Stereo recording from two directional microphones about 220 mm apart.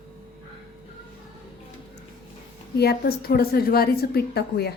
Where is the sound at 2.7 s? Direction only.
45° left (ahead or behind).